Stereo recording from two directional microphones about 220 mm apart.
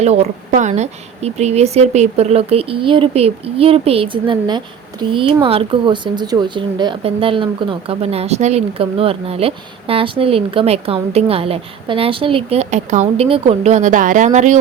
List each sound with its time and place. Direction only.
0.0 s a woman's voice: 30° right (ahead or behind)